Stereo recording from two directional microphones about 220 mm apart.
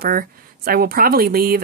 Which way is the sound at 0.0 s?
40° right (ahead or behind).